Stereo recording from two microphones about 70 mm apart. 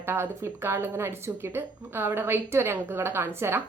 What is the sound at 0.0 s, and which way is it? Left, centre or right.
A woman's voice, right.